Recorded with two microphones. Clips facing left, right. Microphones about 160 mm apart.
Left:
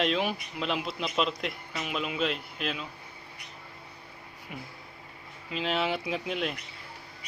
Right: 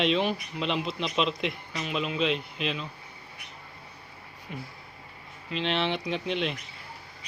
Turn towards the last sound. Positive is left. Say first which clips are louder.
# right 2 dB
turn(degrees=5)  # may be behind; listen again after turning